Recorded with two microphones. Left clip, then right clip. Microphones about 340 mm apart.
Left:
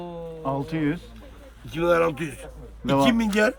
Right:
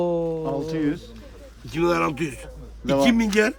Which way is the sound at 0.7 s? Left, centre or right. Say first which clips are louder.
Right 2 dB; left.